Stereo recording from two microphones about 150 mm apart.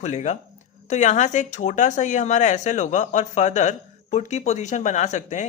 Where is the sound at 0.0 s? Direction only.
50° left (ahead or behind).